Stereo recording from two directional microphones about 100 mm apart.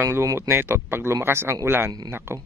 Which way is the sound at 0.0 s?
30° right (ahead or behind).